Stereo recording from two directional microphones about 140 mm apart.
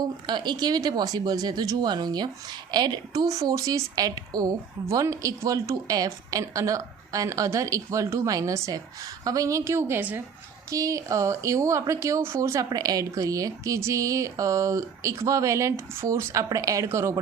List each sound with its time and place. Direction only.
0.3 s speech: 35° right (ahead or behind)